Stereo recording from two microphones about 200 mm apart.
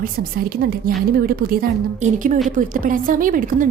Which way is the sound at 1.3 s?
50° right (ahead or behind).